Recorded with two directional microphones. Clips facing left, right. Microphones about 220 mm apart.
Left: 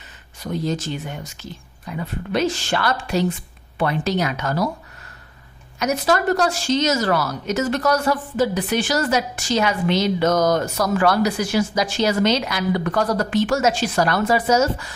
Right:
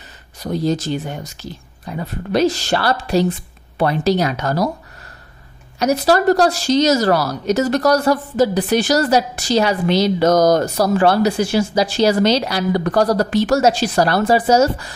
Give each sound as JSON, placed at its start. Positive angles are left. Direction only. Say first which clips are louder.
{"t": 0.4, "sound": "speech", "louder": "right 5 dB", "side_deg": -35}
{"t": 5.8, "sound": "speech", "louder": "right 5 dB", "side_deg": -35}